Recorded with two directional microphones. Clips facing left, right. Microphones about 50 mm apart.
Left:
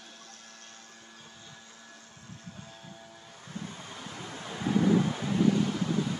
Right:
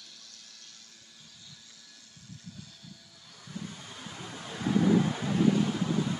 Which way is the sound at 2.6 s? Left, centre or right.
Left.